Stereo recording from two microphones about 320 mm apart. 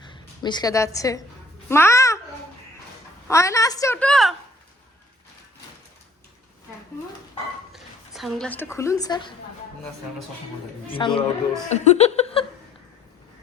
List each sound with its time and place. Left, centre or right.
0.0 s a woman's voice: centre
1.6 s babbling: centre
3.2 s a woman's voice: centre
7.7 s speech: centre
10.8 s a woman's voice: centre
11.7 s a sound: centre